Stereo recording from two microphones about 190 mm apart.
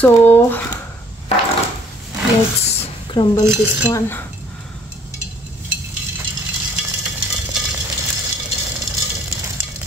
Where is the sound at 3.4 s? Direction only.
15° right (ahead or behind).